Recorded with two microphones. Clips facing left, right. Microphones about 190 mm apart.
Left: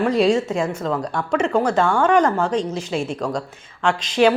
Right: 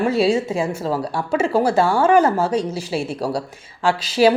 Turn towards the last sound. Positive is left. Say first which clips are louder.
# right 1 dB
turn(degrees=-5)  # may be behind; listen again after turning